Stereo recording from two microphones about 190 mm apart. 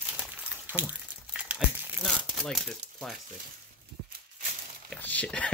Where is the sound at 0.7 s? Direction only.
10° right (ahead or behind).